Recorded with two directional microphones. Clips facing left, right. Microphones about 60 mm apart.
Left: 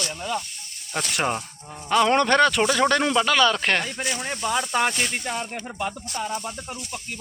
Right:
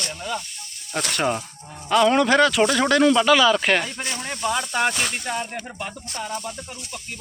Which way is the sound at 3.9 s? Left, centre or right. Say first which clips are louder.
Left 2 dB; centre.